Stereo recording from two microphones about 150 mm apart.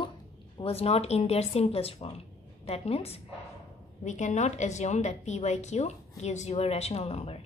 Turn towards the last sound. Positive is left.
turn(degrees=45)  # may be behind; listen again after turning